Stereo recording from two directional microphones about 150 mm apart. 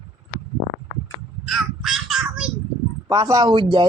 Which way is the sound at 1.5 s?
Centre (ahead or behind).